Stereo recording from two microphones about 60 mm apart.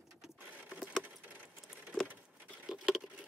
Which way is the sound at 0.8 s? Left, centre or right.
Right.